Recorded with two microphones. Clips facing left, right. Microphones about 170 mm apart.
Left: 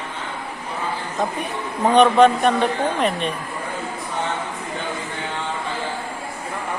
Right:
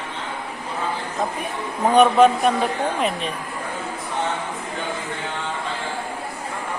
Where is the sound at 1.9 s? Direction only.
5° right (ahead or behind).